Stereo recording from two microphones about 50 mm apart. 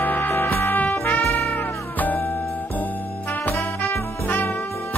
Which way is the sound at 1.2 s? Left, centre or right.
Left.